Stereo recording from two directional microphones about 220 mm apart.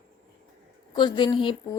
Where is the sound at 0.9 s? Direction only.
20° left (ahead or behind).